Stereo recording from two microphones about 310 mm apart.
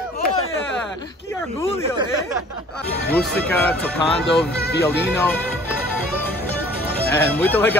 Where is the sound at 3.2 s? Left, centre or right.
Centre.